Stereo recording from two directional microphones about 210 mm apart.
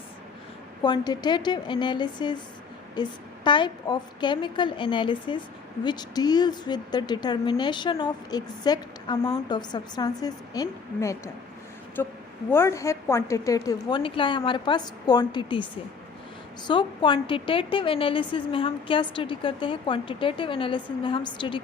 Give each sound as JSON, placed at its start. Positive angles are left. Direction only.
{"t": 0.8, "sound": "a woman's voice", "side_deg": 20}
{"t": 16.6, "sound": "a woman's voice", "side_deg": 20}